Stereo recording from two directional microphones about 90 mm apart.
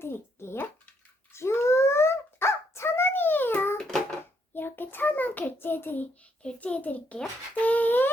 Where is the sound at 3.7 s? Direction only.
5° left (ahead or behind).